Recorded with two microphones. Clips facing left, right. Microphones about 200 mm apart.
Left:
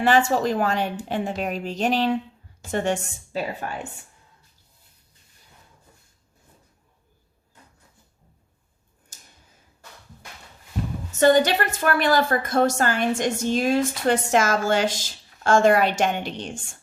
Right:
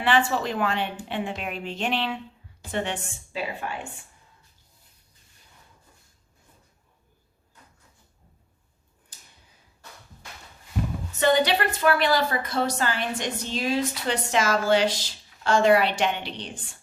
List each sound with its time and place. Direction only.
0.0 s a woman's voice: 45° left (ahead or behind)
9.1 s a sound: 45° left (ahead or behind)
11.2 s a woman's voice: 45° left (ahead or behind)